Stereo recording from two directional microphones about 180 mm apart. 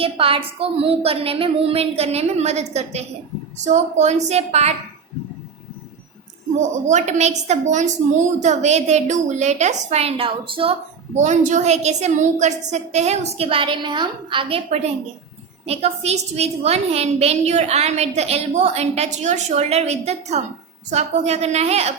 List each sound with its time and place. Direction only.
0.0 s a woman's voice: 30° right (ahead or behind)
6.6 s a woman's voice: 40° right (ahead or behind)